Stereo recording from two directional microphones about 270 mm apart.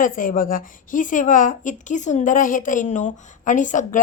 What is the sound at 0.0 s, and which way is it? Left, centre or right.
A woman's voice, left.